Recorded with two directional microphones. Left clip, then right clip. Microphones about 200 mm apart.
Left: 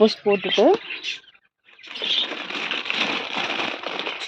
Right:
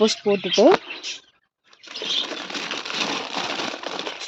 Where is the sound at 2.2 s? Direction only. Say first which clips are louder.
Left 2 dB; 25° right (ahead or behind).